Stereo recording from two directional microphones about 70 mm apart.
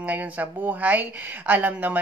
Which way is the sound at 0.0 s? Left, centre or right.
Right.